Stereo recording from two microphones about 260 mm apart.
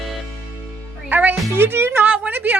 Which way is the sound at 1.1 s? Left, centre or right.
Centre.